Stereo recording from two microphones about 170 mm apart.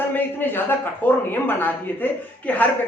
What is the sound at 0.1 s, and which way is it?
Speech, 10° left (ahead or behind).